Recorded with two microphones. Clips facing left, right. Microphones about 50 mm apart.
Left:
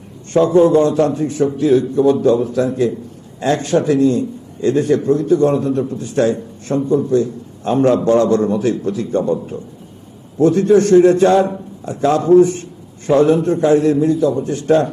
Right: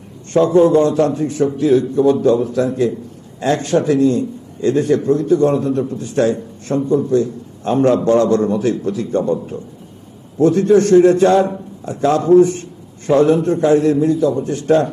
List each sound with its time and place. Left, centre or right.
0.3 s a man's voice: centre